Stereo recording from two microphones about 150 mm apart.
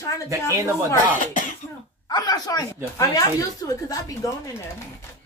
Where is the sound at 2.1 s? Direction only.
25° left (ahead or behind).